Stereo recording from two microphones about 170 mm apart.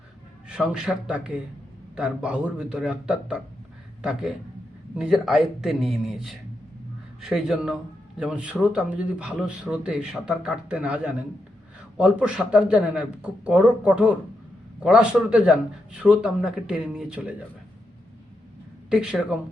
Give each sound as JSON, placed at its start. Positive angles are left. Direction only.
{"t": 0.4, "sound": "a man's voice", "side_deg": -5}
{"t": 7.2, "sound": "a man's voice", "side_deg": 0}
{"t": 18.9, "sound": "a man's voice", "side_deg": -5}